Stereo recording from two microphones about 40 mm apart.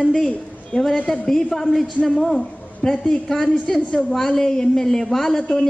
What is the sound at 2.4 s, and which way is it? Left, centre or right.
A woman's voice, centre.